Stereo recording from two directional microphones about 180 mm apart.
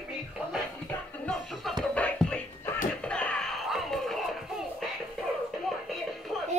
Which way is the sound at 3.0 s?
5° left (ahead or behind).